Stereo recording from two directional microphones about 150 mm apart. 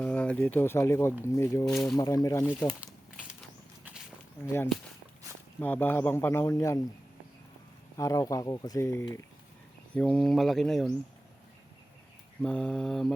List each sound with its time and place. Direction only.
0.0 s a man's voice: 10° left (ahead or behind)
1.6 s speech: centre (ahead or behind)
2.0 s speech: 25° left (ahead or behind)
5.5 s a man's voice: 15° left (ahead or behind)
7.9 s speech: 20° left (ahead or behind)
9.9 s speech: 5° left (ahead or behind)
12.4 s speech: 5° left (ahead or behind)